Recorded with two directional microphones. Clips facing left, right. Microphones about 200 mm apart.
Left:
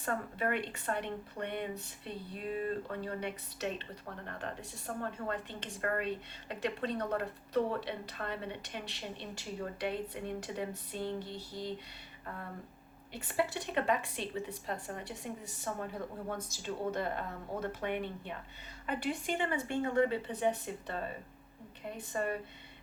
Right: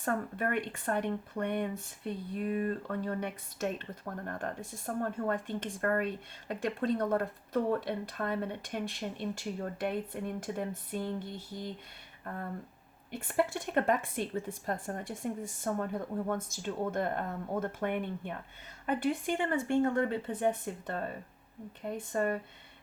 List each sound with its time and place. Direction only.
0.0 s speech: 45° right (ahead or behind)
13.1 s speech: 50° right (ahead or behind)